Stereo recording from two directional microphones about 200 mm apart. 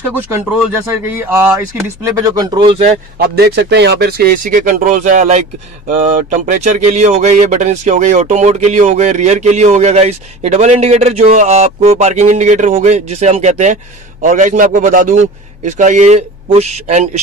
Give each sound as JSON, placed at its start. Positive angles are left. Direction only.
{"t": 1.0, "sound": "speech", "side_deg": -10}
{"t": 3.2, "sound": "speech", "side_deg": -55}